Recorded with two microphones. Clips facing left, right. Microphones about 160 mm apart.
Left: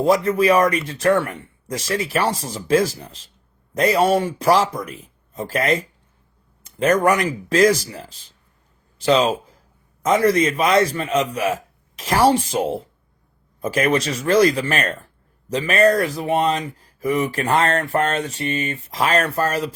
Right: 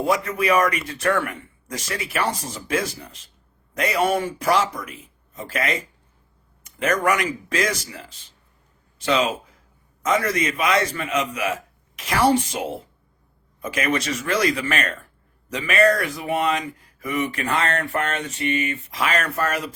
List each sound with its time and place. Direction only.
0.0 s speech: 35° left (ahead or behind)
6.7 s a sound: 35° left (ahead or behind)
7.0 s speech: 35° left (ahead or behind)